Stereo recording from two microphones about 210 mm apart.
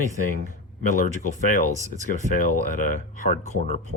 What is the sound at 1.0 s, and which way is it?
Speech, 35° left (ahead or behind).